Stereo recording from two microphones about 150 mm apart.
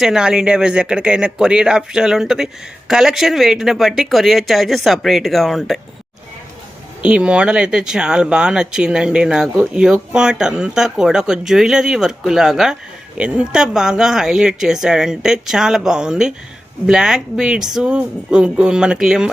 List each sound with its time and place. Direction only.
0.0 s speech: 5° right (ahead or behind)
7.0 s speech: 5° right (ahead or behind)